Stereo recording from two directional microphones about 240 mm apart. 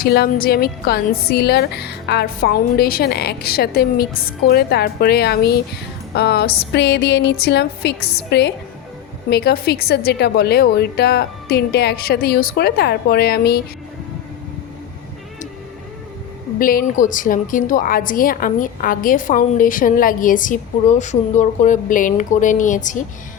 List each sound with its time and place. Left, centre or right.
0.0 s a woman's voice: left
6.1 s a sound: left
9.3 s a woman's voice: left
16.6 s a woman's voice: left